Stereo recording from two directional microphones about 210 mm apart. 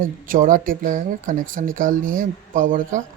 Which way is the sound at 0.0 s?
40° right (ahead or behind).